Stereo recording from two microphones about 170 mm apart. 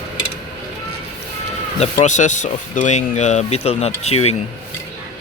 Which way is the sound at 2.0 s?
45° left (ahead or behind).